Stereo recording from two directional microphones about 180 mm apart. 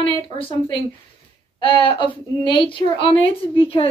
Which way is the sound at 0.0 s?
30° left (ahead or behind).